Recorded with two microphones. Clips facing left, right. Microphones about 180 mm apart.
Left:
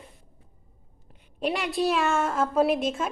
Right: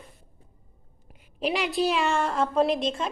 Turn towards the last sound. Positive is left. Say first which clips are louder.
# left 1 dB
turn(degrees=5)  # may be behind; listen again after turning